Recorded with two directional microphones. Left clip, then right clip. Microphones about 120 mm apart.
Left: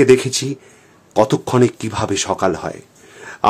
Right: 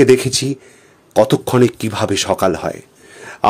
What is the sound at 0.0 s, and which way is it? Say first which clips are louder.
A man's voice: right 1 dB; 15° right (ahead or behind).